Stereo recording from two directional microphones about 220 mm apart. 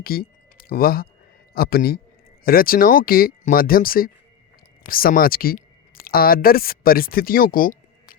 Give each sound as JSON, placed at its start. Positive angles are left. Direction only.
{"t": 0.0, "sound": "a man's voice", "side_deg": 45}